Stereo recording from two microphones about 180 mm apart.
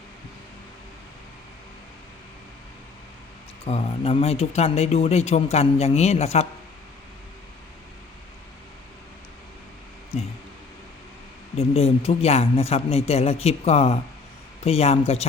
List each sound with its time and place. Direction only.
3.7 s speech: 35° left (ahead or behind)
11.5 s speech: 35° left (ahead or behind)